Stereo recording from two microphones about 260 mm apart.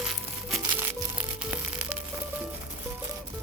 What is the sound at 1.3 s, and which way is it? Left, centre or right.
Music, centre.